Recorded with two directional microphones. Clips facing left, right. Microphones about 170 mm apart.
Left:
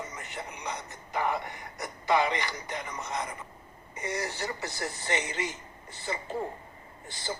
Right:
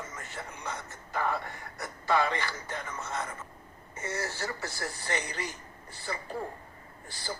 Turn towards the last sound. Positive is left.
turn(degrees=20)  # may be behind; listen again after turning